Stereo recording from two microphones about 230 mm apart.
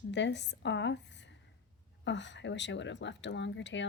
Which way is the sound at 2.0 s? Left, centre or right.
Left.